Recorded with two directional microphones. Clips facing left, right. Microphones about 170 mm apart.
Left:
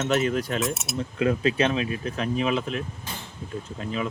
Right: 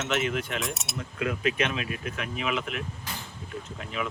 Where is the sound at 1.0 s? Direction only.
30° left (ahead or behind).